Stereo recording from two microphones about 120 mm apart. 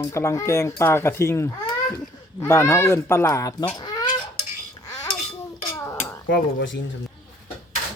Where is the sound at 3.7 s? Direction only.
35° left (ahead or behind).